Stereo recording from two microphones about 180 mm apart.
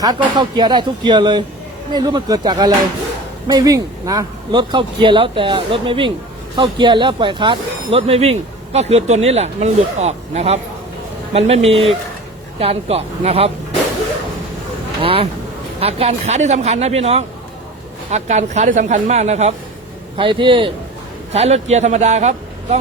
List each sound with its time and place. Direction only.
0.3 s speech: 25° right (ahead or behind)
15.0 s speech: 30° right (ahead or behind)
20.1 s speech: 30° right (ahead or behind)